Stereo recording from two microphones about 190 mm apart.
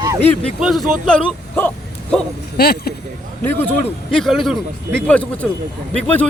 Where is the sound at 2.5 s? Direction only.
55° left (ahead or behind).